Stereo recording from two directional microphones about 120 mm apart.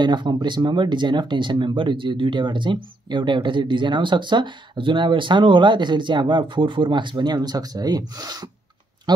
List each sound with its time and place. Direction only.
0.0 s speech: 40° right (ahead or behind)